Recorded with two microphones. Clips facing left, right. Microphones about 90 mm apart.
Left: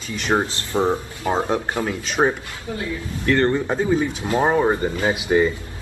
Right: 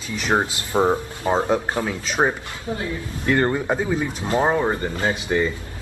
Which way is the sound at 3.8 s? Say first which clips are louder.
Left 3 dB; centre (ahead or behind).